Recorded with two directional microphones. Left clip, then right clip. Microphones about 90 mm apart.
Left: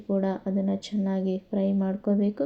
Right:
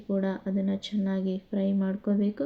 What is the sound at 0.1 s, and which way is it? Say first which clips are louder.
Speech: left 3 dB; 25° left (ahead or behind).